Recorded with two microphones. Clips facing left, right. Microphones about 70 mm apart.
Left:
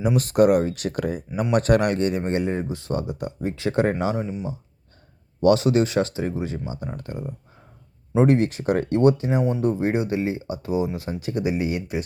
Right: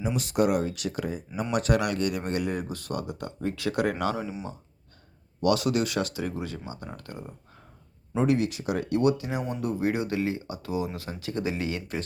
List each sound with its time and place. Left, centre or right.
0.0 s speech: left
5.4 s speech: left
8.2 s speech: left; by 12.0 s centre